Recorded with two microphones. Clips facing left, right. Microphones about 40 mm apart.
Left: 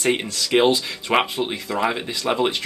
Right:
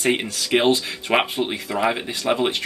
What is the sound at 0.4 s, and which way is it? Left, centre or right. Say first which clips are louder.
Speech: left 2 dB; centre.